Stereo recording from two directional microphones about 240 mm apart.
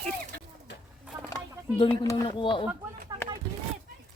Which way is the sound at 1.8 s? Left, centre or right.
Centre.